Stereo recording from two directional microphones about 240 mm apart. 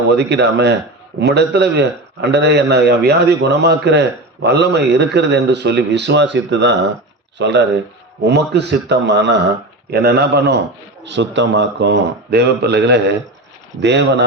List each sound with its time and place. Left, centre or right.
0.1 s a man's voice: right